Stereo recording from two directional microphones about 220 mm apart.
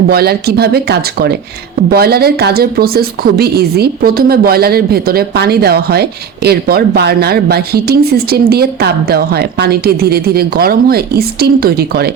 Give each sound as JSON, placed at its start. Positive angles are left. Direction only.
{"t": 0.1, "sound": "a woman's voice", "side_deg": -45}